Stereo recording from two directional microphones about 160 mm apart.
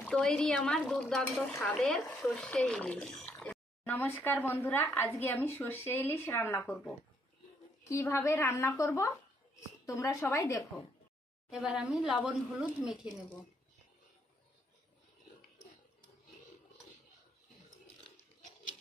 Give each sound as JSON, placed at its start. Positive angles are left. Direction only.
{"t": 0.0, "sound": "speech", "side_deg": 5}
{"t": 7.9, "sound": "a woman's voice", "side_deg": 15}
{"t": 11.5, "sound": "speech", "side_deg": -5}